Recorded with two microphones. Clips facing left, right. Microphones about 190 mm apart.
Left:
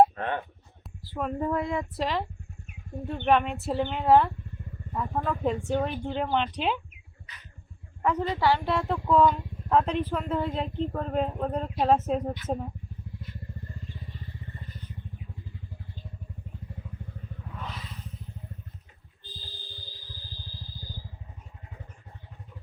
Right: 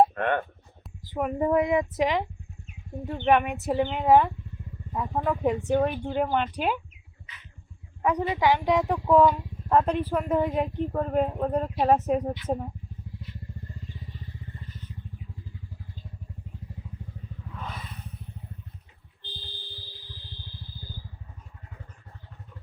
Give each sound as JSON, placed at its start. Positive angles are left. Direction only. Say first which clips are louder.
{"t": 0.2, "sound": "speech", "louder": "right 5 dB", "side_deg": -65}
{"t": 1.0, "sound": "speech", "louder": "right 3 dB", "side_deg": -15}
{"t": 3.2, "sound": "speech", "louder": "right 2 dB", "side_deg": -15}
{"t": 8.0, "sound": "speech", "louder": "right 1 dB", "side_deg": -15}
{"t": 17.7, "sound": "vehicle", "louder": "right 1 dB", "side_deg": -55}
{"t": 19.2, "sound": "fire alarm", "louder": "right 2 dB", "side_deg": -65}